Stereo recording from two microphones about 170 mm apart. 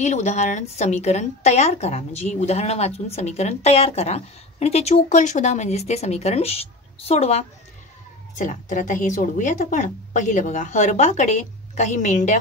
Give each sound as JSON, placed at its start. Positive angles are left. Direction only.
{"t": 0.0, "sound": "a woman's voice", "side_deg": 45}